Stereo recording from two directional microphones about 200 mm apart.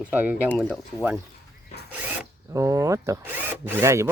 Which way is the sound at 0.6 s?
10° left (ahead or behind).